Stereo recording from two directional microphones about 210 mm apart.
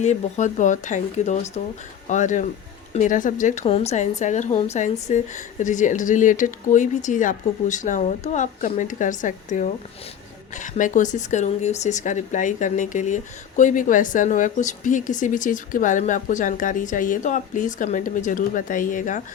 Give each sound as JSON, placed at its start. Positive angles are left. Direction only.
{"t": 0.0, "sound": "speech", "side_deg": 35}